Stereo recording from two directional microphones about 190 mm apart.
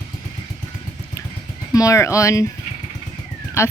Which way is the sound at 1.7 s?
15° left (ahead or behind).